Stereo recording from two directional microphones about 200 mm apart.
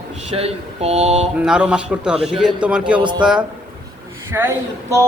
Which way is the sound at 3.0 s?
20° right (ahead or behind).